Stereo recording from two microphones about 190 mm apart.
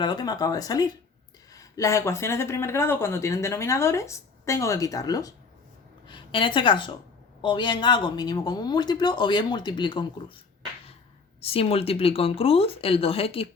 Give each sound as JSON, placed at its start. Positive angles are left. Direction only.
{"t": 0.0, "sound": "speech", "side_deg": 20}
{"t": 11.3, "sound": "speech", "side_deg": 30}